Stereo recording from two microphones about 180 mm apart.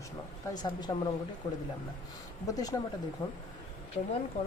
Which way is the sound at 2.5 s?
20° left (ahead or behind).